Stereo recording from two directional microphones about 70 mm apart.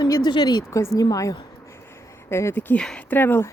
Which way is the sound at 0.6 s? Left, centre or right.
Left.